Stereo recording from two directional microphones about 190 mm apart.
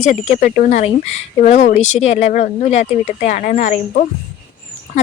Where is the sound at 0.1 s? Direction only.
40° left (ahead or behind).